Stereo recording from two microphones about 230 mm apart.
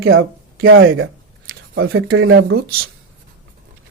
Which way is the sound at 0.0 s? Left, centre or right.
Right.